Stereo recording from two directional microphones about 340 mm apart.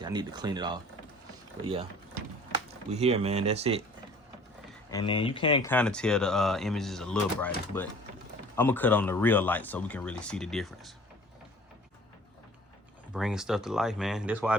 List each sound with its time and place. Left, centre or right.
0.0 s speech: centre
2.9 s speech: centre
4.9 s speech: centre
13.1 s speech: centre